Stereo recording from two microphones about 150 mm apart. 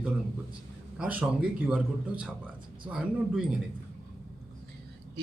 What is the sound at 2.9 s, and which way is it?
Speech, 5° right (ahead or behind).